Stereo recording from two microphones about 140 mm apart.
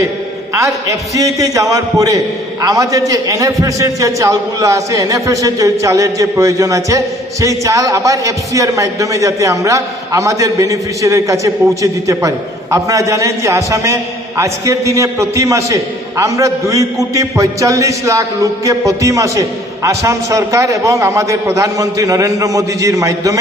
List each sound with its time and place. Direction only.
0.5 s a man's voice: 25° right (ahead or behind)